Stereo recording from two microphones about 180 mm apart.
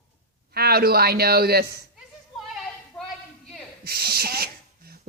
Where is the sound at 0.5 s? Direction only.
60° right (ahead or behind).